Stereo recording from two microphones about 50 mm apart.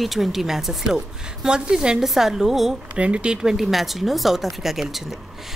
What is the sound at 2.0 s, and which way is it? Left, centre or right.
Speech, centre.